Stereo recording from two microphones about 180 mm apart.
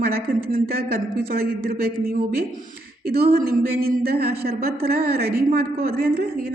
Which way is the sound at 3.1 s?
55° right (ahead or behind).